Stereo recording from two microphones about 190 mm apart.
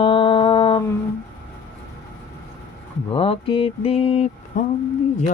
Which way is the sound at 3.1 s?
30° left (ahead or behind).